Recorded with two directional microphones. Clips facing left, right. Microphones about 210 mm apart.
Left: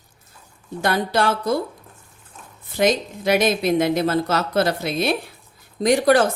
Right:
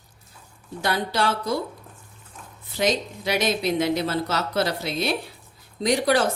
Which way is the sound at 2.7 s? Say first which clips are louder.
Left 4 dB; 50° left (ahead or behind).